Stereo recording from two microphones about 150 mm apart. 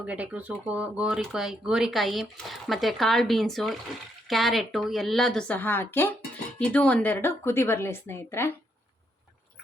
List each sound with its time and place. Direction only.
0.0 s a woman's voice: 10° right (ahead or behind); by 8.5 s 15° left (ahead or behind)